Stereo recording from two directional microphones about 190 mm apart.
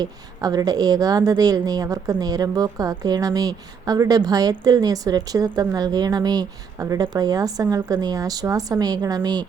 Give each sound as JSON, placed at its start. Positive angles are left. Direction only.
{"t": 0.0, "sound": "a woman's voice", "side_deg": -20}